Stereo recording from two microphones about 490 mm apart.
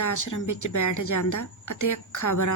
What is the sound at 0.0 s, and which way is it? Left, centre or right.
A woman's voice, left.